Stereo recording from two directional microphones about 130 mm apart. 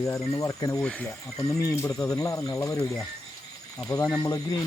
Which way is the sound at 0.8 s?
10° left (ahead or behind).